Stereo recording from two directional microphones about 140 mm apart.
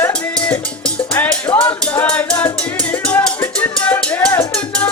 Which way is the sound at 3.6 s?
10° left (ahead or behind).